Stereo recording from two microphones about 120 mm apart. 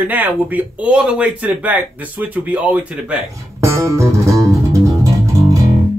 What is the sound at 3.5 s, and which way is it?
Music, 25° right (ahead or behind).